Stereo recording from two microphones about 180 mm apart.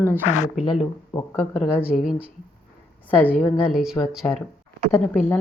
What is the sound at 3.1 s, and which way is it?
A woman's voice, 10° left (ahead or behind).